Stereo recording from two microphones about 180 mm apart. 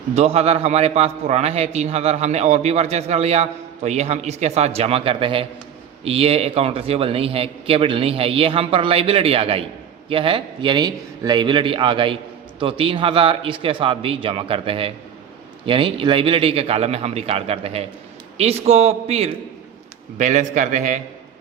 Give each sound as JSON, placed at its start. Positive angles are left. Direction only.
{"t": 0.1, "sound": "a man's voice", "side_deg": -35}